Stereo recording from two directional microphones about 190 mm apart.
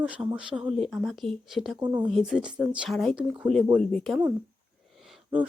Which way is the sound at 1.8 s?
20° right (ahead or behind).